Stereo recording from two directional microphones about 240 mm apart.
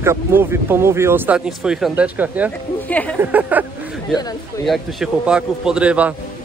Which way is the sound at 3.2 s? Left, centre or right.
Centre.